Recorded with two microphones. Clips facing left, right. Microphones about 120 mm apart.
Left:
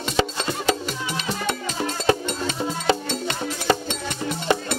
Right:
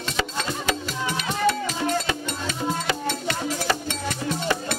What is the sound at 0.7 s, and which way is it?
Music, 30° left (ahead or behind).